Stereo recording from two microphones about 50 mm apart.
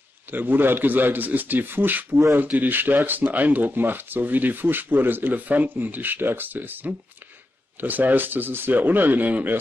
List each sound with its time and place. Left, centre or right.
0.3 s speech: right